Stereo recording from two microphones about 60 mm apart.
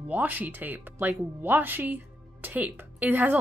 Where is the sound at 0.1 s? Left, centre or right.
Right.